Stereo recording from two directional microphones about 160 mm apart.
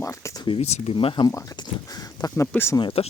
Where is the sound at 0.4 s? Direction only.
40° left (ahead or behind); by 2.7 s 15° left (ahead or behind).